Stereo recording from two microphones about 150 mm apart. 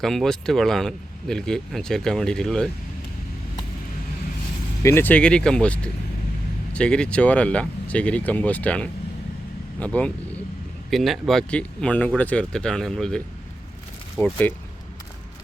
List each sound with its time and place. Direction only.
0.0 s speech: centre (ahead or behind)
4.8 s speech: 15° left (ahead or behind)
14.2 s speech: 15° left (ahead or behind)